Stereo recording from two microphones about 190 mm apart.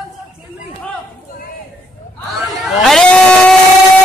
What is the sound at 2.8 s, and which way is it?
Vehicle, centre (ahead or behind).